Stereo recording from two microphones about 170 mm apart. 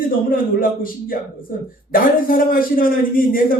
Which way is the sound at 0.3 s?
55° left (ahead or behind).